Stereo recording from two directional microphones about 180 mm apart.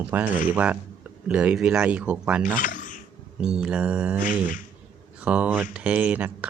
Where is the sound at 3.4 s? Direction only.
5° right (ahead or behind).